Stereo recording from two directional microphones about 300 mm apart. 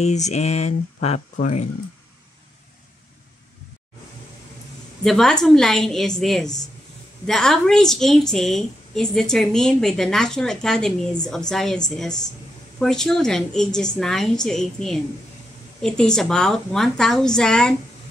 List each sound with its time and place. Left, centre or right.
0.0 s speech: left
5.0 s a woman's voice: centre